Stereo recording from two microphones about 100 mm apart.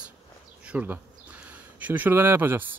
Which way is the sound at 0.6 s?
15° right (ahead or behind).